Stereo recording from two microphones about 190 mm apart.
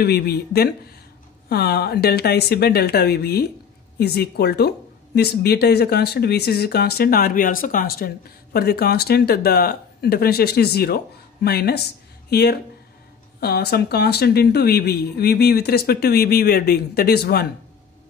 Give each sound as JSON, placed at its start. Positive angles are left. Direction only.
{"t": 0.0, "sound": "speech", "side_deg": 55}